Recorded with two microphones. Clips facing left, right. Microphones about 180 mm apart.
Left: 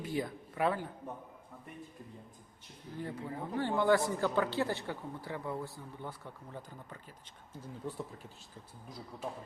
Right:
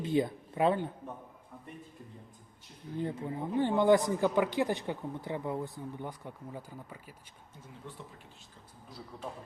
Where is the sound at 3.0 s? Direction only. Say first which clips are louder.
Right 5 dB; 20° right (ahead or behind).